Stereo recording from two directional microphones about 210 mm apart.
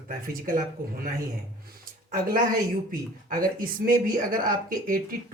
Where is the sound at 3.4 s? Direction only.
45° right (ahead or behind).